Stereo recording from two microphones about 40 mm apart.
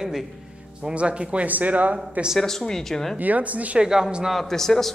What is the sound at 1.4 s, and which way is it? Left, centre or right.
Speech, right.